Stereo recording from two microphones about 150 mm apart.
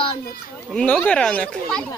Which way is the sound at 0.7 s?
10° left (ahead or behind).